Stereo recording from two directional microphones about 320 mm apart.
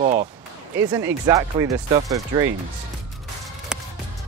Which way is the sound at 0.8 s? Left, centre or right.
Centre.